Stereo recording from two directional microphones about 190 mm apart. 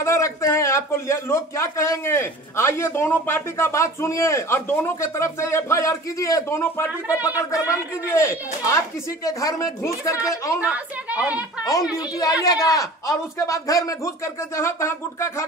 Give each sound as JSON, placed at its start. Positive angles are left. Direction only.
{"t": 0.0, "sound": "a man's voice", "side_deg": 15}
{"t": 10.6, "sound": "a woman's voice", "side_deg": -5}
{"t": 11.6, "sound": "a child's voice", "side_deg": 20}